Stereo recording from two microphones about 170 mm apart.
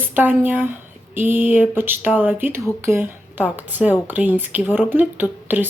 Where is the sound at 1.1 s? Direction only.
10° right (ahead or behind).